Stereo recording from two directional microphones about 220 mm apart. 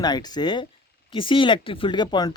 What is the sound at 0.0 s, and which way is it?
Speech, 20° left (ahead or behind).